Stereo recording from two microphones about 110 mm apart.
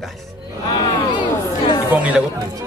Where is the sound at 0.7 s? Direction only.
45° left (ahead or behind).